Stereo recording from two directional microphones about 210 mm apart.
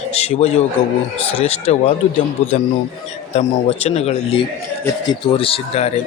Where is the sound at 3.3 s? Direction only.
30° left (ahead or behind).